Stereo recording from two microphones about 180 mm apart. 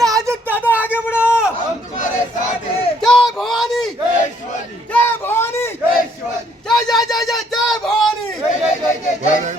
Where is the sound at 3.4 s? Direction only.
Centre (ahead or behind).